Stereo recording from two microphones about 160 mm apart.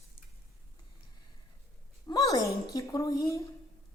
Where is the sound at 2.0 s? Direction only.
25° left (ahead or behind).